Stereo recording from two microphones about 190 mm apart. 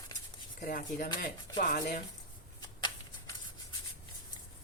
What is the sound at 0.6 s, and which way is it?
Speech, 45° left (ahead or behind).